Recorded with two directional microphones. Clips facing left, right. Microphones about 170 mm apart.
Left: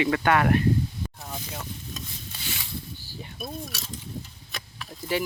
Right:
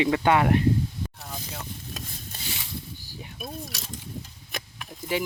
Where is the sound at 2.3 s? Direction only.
50° right (ahead or behind).